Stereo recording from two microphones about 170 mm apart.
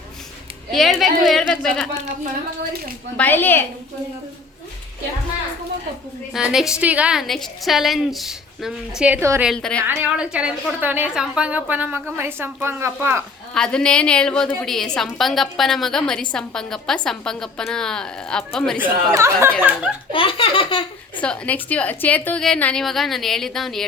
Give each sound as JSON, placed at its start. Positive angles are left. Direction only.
{"t": 0.7, "sound": "a woman's voice", "side_deg": 0}
{"t": 3.2, "sound": "a woman's voice", "side_deg": 10}
{"t": 6.3, "sound": "a woman's voice", "side_deg": -5}
{"t": 9.5, "sound": "a woman's voice", "side_deg": 5}
{"t": 9.8, "sound": "a woman's voice", "side_deg": -5}
{"t": 13.5, "sound": "a woman's voice", "side_deg": 5}
{"t": 18.8, "sound": "a woman's voice", "side_deg": -15}
{"t": 20.1, "sound": "laughter", "side_deg": 30}
{"t": 21.2, "sound": "a woman's voice", "side_deg": 10}